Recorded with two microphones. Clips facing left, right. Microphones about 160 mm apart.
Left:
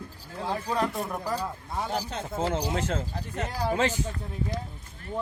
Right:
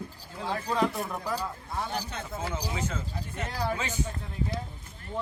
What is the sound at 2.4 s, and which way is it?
Speech, 80° left.